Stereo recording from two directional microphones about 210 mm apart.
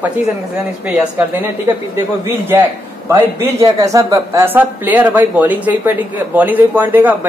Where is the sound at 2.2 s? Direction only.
15° right (ahead or behind).